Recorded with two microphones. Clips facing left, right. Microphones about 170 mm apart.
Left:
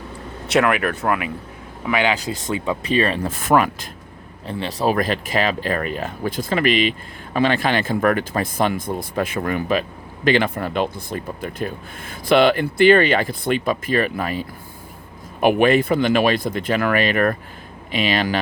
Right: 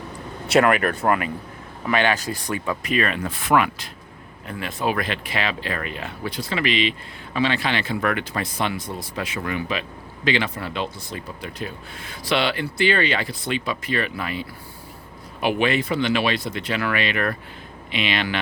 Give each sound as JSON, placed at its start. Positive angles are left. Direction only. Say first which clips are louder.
{"t": 0.4, "sound": "speech", "louder": "even", "side_deg": 0}
{"t": 3.2, "sound": "speech", "louder": "left 3 dB", "side_deg": 45}
{"t": 4.4, "sound": "speech", "louder": "left 4 dB", "side_deg": 35}